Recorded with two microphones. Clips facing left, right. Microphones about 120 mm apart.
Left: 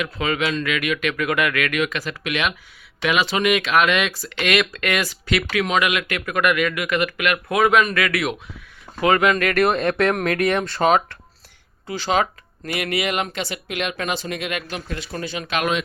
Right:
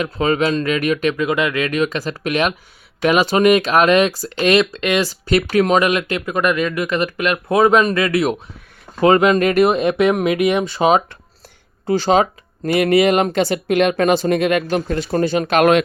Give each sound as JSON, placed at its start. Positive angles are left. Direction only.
{"t": 0.0, "sound": "speech", "side_deg": -35}
{"t": 1.1, "sound": "speech", "side_deg": -25}
{"t": 5.0, "sound": "speech", "side_deg": -35}
{"t": 11.9, "sound": "speech", "side_deg": -35}